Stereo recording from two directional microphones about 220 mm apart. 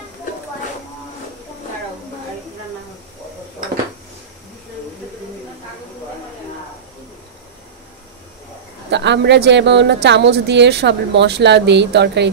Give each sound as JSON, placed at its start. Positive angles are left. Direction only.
{"t": 8.9, "sound": "speech", "side_deg": -50}